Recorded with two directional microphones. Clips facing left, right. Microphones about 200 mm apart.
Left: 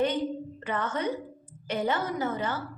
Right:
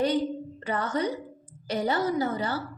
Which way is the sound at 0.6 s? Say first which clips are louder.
Right 2 dB; 35° right (ahead or behind).